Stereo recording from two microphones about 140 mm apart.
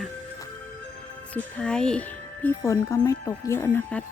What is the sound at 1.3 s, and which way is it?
Speech, 10° left (ahead or behind).